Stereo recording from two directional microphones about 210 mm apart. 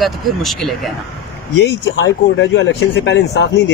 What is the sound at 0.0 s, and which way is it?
Speech, centre (ahead or behind).